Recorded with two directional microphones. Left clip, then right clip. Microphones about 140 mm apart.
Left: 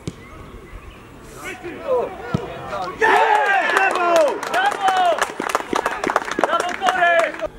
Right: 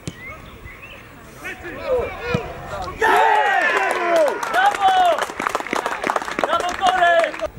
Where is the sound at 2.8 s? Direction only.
5° right (ahead or behind).